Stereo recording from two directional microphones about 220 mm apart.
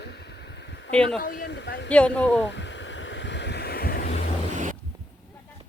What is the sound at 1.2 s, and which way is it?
Speech, 45° left (ahead or behind).